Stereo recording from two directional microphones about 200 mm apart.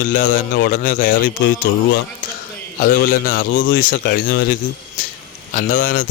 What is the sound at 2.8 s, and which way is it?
Speech, 45° left (ahead or behind).